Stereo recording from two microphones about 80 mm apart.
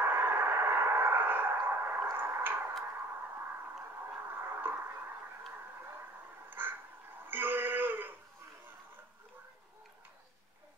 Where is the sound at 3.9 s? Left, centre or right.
Right.